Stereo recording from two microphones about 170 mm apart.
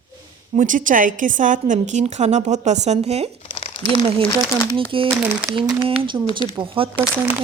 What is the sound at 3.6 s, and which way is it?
Crumpling, 30° left (ahead or behind).